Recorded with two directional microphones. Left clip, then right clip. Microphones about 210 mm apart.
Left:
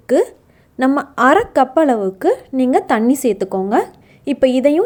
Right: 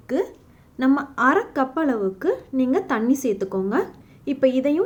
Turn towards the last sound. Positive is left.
turn(degrees=40)  # may be behind; listen again after turning